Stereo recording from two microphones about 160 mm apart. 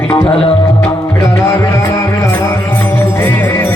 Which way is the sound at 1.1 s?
15° left (ahead or behind).